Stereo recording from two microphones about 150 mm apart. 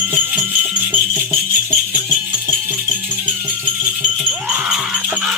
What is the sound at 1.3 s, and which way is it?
Music, 10° right (ahead or behind).